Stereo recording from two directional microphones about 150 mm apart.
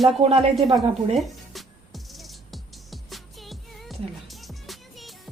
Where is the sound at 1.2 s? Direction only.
Centre (ahead or behind).